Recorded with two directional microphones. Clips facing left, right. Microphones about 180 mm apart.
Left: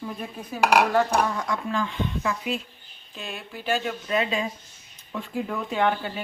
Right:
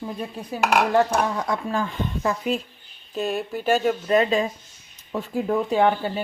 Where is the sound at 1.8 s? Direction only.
40° right (ahead or behind).